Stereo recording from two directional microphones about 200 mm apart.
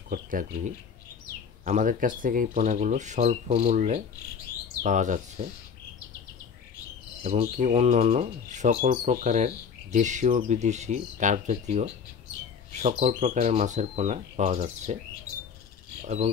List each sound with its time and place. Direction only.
0.1 s speech: 45° right (ahead or behind)
7.2 s speech: 35° right (ahead or behind)